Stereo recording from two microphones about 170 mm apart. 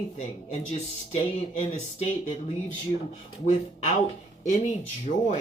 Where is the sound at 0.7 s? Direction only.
40° left (ahead or behind).